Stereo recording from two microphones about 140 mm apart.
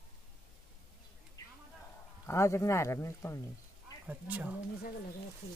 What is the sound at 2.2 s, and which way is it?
Speech, 20° left (ahead or behind).